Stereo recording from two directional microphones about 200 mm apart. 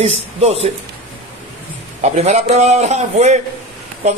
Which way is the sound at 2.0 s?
35° right (ahead or behind).